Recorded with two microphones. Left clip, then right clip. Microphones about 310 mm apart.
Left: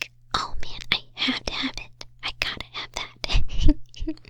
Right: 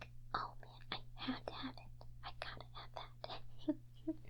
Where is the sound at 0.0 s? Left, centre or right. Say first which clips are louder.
Left 16 dB; left.